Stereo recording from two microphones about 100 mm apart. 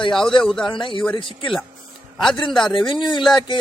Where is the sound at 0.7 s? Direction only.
55° left (ahead or behind).